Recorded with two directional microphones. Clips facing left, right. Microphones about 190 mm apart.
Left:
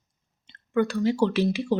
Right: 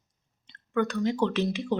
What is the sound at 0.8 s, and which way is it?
Speech, 10° left (ahead or behind).